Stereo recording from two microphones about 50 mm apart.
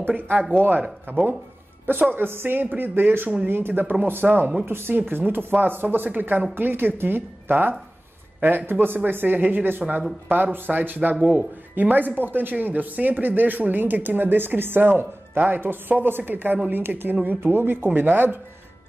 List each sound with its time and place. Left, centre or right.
0.0 s speech: right
17.4 s speech: right